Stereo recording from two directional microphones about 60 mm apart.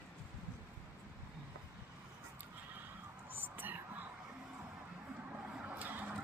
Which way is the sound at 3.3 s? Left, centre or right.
Right.